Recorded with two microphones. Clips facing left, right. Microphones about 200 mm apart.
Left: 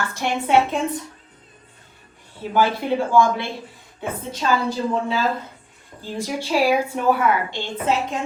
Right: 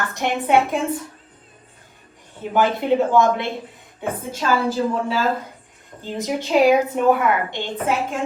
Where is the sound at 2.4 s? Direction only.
20° right (ahead or behind).